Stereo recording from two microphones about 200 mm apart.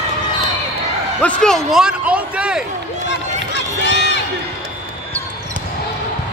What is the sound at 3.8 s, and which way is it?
Crowd, 60° left (ahead or behind).